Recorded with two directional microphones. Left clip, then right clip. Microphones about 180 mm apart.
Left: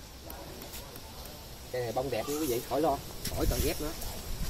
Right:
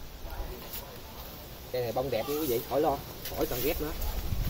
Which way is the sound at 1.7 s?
30° left (ahead or behind).